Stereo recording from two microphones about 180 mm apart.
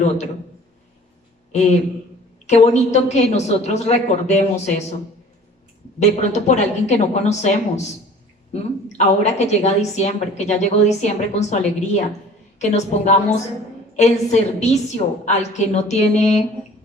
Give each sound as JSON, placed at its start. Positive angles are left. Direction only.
{"t": 2.5, "sound": "a woman's voice", "side_deg": 40}
{"t": 6.0, "sound": "a woman's voice", "side_deg": 40}